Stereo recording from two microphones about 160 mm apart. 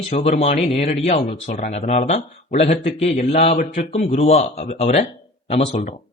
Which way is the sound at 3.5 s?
60° left (ahead or behind).